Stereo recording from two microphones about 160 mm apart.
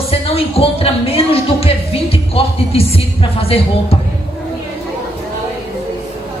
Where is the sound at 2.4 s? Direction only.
35° left (ahead or behind).